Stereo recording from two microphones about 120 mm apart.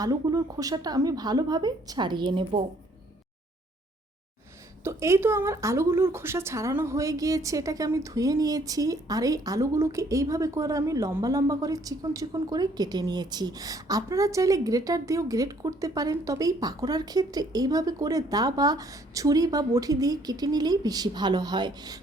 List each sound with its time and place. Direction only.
0.0 s speech: 30° right (ahead or behind); by 2.6 s 50° right (ahead or behind)
4.8 s a woman's voice: 25° right (ahead or behind)